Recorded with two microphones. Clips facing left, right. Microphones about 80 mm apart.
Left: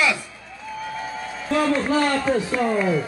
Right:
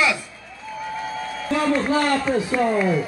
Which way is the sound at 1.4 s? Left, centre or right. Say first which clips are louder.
Even; centre.